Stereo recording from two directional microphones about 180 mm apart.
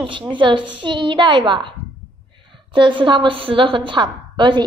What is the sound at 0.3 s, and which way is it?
A woman's voice, 25° right (ahead or behind).